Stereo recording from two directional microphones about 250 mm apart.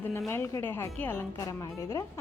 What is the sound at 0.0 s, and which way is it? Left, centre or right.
Speech, centre.